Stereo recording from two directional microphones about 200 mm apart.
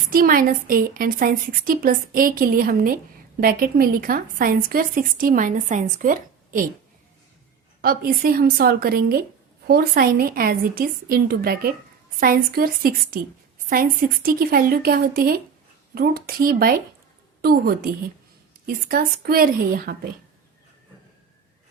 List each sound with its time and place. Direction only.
0.1 s speech: 45° right (ahead or behind)
7.8 s speech: 50° right (ahead or behind)